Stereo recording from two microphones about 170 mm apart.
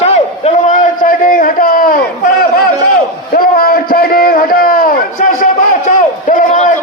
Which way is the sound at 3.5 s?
60° left (ahead or behind).